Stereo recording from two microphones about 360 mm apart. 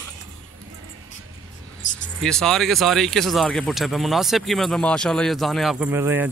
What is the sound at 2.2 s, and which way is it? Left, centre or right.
Speech, centre.